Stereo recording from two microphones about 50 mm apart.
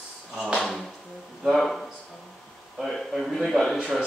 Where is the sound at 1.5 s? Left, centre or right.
Centre.